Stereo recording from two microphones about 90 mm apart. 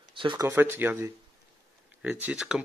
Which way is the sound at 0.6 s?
20° right (ahead or behind).